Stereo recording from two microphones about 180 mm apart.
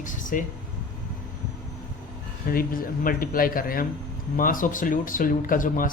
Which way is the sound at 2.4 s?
55° left (ahead or behind).